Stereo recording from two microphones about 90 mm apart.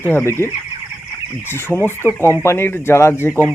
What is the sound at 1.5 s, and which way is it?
Speech, 25° left (ahead or behind).